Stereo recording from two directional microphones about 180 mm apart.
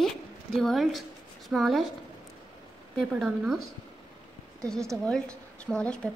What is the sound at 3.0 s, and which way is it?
A woman's voice, centre (ahead or behind).